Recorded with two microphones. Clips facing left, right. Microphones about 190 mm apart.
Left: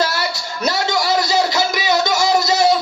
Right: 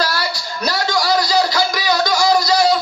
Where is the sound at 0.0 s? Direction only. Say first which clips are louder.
Left 1 dB; 25° left (ahead or behind).